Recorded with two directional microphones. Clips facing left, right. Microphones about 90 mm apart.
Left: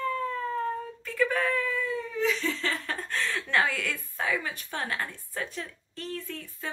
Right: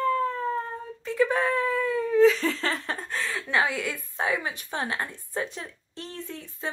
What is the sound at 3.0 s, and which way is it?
Chuckle, 10° right (ahead or behind).